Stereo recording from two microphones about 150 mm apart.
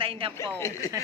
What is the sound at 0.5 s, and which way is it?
Speech, 20° left (ahead or behind).